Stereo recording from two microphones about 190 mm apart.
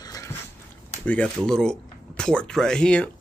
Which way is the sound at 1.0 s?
5° left (ahead or behind).